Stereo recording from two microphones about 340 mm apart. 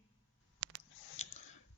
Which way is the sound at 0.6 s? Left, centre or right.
Right.